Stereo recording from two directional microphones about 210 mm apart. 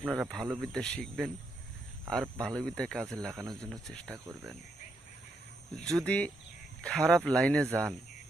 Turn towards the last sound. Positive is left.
turn(degrees=5)  # may be behind; listen again after turning